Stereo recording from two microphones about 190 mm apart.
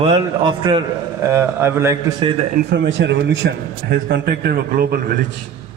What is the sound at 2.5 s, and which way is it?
A man's voice, 65° right (ahead or behind).